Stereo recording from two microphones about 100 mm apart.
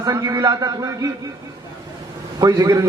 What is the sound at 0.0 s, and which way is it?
A man's voice, 35° right (ahead or behind).